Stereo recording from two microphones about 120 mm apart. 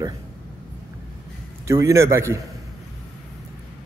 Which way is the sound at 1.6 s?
25° right (ahead or behind).